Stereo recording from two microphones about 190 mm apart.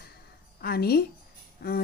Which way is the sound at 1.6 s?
55° left (ahead or behind).